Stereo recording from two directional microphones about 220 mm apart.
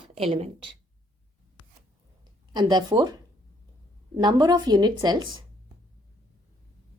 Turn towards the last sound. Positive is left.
turn(degrees=-20)  # may be behind; listen again after turning